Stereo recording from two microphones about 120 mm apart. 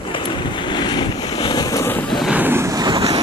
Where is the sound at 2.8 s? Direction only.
40° right (ahead or behind).